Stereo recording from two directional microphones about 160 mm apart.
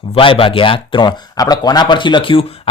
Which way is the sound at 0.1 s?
35° left (ahead or behind).